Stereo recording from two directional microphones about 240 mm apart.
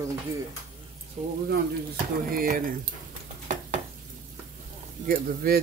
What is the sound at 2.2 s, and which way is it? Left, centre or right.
Speech, right.